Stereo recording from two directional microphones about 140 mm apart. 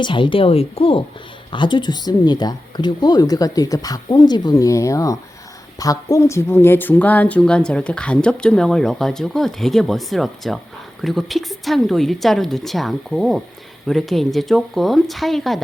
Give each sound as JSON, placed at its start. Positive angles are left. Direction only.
{"t": 0.0, "sound": "speech", "side_deg": 35}